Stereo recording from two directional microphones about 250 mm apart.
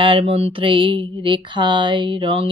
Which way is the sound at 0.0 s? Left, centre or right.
Right.